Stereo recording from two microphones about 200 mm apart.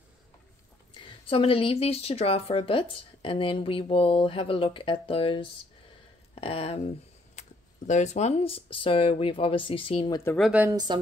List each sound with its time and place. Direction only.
1.0 s speech: 25° left (ahead or behind)
10.3 s speech: 5° right (ahead or behind)